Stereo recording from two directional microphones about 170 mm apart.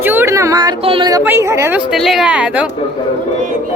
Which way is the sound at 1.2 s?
15° right (ahead or behind).